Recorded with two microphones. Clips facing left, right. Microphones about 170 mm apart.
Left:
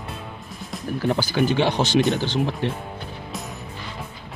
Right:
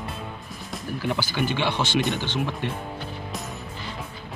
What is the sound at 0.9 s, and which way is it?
Speech, 45° left (ahead or behind).